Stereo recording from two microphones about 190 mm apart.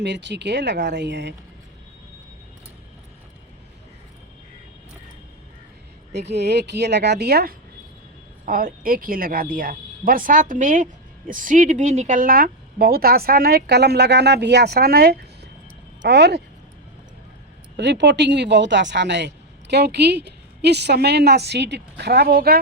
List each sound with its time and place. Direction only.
0.0 s a woman's voice: 70° right (ahead or behind)
6.1 s a woman's voice: 60° right (ahead or behind)
17.7 s a woman's voice: 70° right (ahead or behind)